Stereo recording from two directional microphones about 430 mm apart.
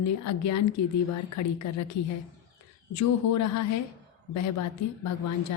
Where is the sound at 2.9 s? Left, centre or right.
Left.